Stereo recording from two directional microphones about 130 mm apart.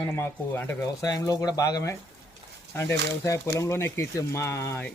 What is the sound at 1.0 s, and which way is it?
Speech, 30° left (ahead or behind).